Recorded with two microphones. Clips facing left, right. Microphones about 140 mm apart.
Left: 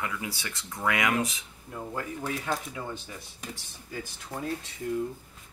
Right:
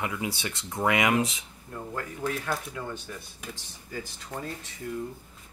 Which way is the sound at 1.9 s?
10° left (ahead or behind).